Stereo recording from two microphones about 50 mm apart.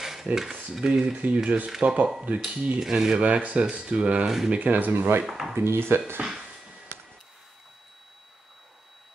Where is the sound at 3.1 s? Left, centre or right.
Right.